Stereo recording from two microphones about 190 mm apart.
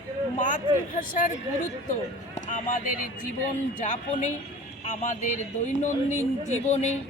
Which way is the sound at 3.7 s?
40° left (ahead or behind).